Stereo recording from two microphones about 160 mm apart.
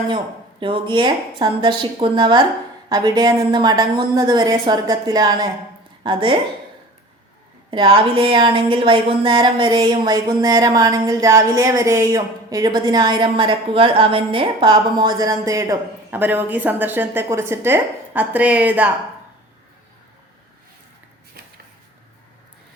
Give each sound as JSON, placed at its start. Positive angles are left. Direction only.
{"t": 0.6, "sound": "a woman's voice", "side_deg": -30}
{"t": 7.7, "sound": "a woman's voice", "side_deg": -35}